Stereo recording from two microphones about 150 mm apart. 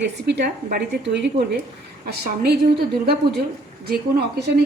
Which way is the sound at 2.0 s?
90° right.